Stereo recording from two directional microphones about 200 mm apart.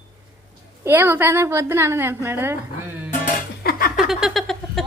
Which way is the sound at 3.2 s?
45° left (ahead or behind).